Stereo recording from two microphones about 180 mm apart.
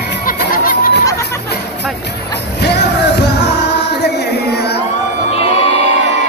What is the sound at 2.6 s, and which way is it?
Music, 70° left (ahead or behind).